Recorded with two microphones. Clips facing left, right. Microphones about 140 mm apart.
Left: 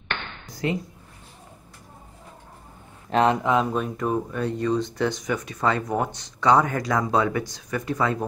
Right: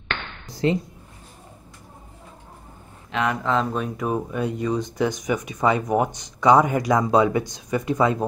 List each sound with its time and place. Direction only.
0.5 s a woman's voice: 30° right (ahead or behind)
3.1 s speech: 35° left (ahead or behind)
3.7 s speech: 5° right (ahead or behind); by 8.3 s 20° right (ahead or behind)